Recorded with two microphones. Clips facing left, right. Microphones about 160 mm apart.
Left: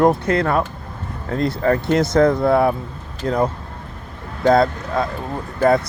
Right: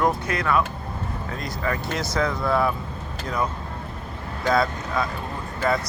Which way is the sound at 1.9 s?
55° left (ahead or behind).